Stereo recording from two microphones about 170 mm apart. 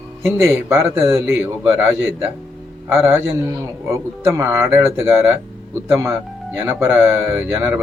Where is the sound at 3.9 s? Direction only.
15° right (ahead or behind).